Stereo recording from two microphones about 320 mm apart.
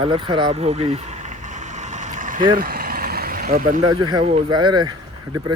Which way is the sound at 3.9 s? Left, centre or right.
Centre.